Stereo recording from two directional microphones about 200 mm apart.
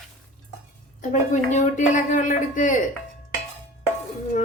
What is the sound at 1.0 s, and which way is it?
A woman's voice, 35° left (ahead or behind).